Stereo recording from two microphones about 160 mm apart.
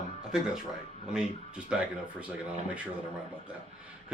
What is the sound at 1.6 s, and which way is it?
Speech, 10° right (ahead or behind).